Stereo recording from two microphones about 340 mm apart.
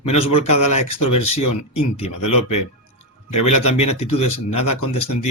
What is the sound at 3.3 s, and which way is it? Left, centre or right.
Speech, left.